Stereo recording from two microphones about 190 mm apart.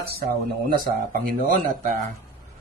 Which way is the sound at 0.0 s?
55° right (ahead or behind).